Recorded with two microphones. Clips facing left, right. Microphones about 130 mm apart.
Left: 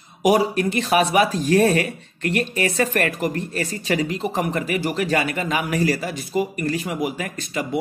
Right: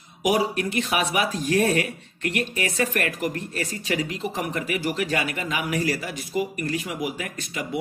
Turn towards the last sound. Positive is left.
turn(degrees=35)  # may be behind; listen again after turning